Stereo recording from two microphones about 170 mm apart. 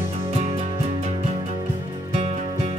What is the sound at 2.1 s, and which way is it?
Music, 40° right (ahead or behind).